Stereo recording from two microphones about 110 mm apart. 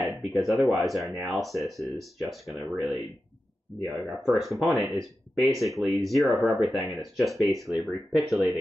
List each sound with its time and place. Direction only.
0.0 s speech: centre (ahead or behind)
3.8 s speech: 5° right (ahead or behind)